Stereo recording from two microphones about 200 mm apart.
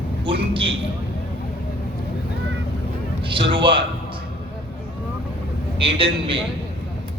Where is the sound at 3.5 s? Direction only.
25° right (ahead or behind).